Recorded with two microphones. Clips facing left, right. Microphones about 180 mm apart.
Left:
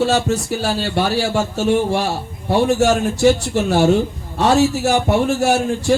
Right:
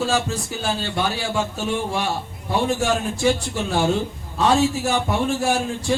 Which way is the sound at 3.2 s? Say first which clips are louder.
Left 6 dB; 70° left (ahead or behind).